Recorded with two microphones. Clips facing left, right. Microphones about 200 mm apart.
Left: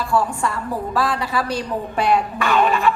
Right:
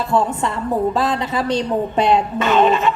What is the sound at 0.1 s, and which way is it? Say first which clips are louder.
A woman's voice: right 1 dB; 20° right (ahead or behind).